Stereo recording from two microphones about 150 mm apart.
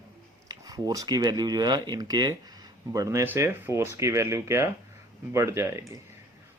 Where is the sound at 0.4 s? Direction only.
25° right (ahead or behind).